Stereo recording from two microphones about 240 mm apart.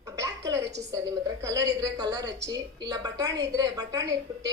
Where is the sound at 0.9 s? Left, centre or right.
Centre.